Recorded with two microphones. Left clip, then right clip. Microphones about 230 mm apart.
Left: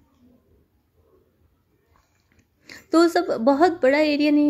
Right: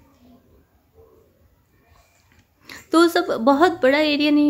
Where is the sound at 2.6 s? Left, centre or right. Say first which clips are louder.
Right 2 dB; centre.